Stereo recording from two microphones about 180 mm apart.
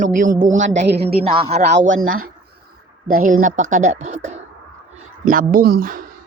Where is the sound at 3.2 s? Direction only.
45° right (ahead or behind).